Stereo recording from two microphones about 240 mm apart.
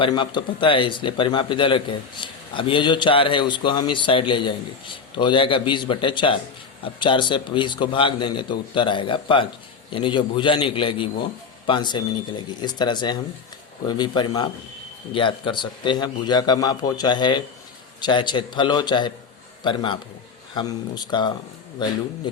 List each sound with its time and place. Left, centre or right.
0.0 s speech: centre